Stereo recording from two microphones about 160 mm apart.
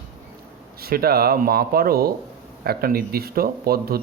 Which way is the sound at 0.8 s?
70° right (ahead or behind).